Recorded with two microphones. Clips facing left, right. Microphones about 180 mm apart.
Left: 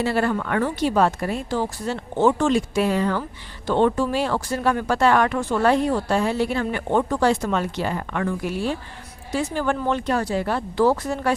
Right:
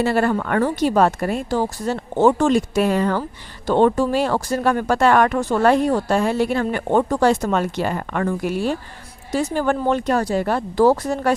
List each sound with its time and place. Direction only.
0.0 s speech: 50° right (ahead or behind)